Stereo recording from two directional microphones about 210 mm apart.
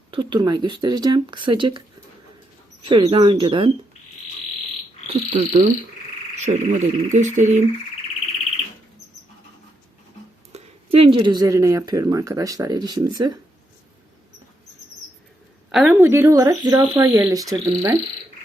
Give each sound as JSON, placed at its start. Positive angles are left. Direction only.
{"t": 0.1, "sound": "speech", "side_deg": -25}
{"t": 2.9, "sound": "speech", "side_deg": -25}
{"t": 5.0, "sound": "speech", "side_deg": -35}
{"t": 10.5, "sound": "speech", "side_deg": -25}
{"t": 15.7, "sound": "speech", "side_deg": -5}